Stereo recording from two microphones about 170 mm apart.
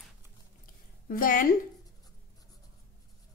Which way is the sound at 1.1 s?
55° left (ahead or behind).